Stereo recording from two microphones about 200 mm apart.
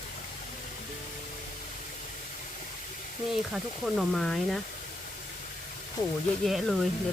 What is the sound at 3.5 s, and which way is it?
Speech, centre (ahead or behind).